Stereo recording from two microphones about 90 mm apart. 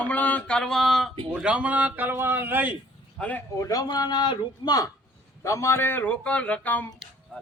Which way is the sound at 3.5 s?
40° left (ahead or behind).